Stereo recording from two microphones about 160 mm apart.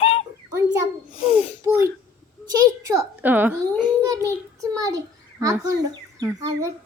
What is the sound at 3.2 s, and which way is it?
Speech, 10° right (ahead or behind).